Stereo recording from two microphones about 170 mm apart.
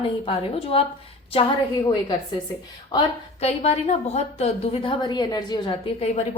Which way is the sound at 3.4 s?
40° left (ahead or behind).